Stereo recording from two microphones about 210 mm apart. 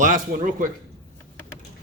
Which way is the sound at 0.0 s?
40° right (ahead or behind).